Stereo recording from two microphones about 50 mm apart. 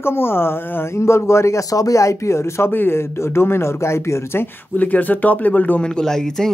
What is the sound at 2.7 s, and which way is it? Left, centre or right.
Speech, left.